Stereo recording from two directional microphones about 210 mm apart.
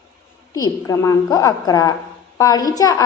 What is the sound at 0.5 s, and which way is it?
A woman's voice, 15° left (ahead or behind).